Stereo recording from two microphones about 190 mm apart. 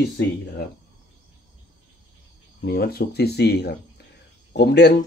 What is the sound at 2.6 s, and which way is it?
Speech, 55° left (ahead or behind).